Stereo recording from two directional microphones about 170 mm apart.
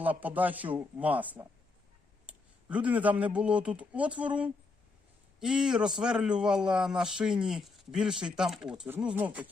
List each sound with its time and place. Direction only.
0.0 s a man's voice: 10° right (ahead or behind)